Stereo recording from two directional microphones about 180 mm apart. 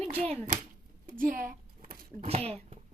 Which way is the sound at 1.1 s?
50° right (ahead or behind).